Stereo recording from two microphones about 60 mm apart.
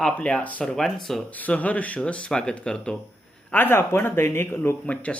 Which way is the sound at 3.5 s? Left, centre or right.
Left.